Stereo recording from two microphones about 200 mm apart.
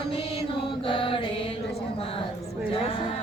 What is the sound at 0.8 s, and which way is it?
Mantra, 25° left (ahead or behind).